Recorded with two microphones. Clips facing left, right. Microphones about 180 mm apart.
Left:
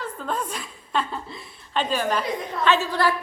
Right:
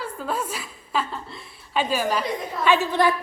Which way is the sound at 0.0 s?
10° right (ahead or behind).